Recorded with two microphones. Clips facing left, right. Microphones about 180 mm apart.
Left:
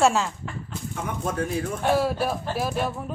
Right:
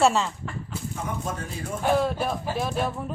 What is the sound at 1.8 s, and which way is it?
Speech, 5° left (ahead or behind).